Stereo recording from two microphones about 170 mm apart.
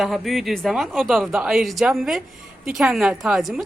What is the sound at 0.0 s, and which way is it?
Speech, centre (ahead or behind).